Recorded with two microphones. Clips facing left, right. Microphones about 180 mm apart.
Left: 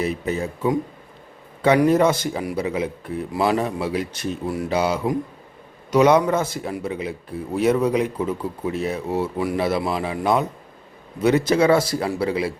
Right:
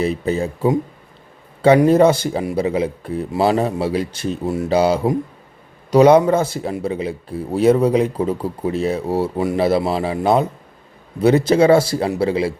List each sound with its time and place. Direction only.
0.0 s a man's voice: 30° right (ahead or behind)